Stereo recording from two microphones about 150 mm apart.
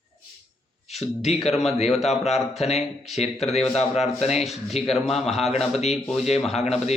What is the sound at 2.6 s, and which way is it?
A man's voice, 45° left (ahead or behind).